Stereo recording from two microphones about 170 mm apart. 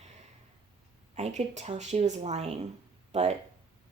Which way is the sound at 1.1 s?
40° right (ahead or behind).